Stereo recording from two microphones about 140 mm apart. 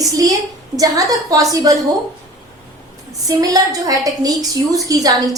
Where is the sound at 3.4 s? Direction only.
25° right (ahead or behind).